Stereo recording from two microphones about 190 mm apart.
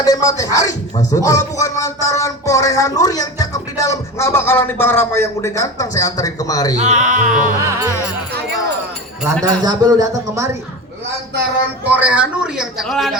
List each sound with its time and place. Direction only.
0.0 s speech: 20° left (ahead or behind)
6.7 s speech: 40° right (ahead or behind)
9.4 s speech: 20° right (ahead or behind)
11.9 s a man's voice: 10° right (ahead or behind)